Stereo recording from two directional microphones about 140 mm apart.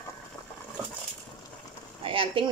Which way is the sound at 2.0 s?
40° right (ahead or behind).